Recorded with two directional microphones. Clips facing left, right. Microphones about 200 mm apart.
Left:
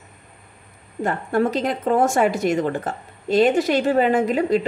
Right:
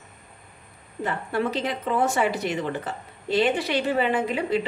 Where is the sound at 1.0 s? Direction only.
45° left (ahead or behind).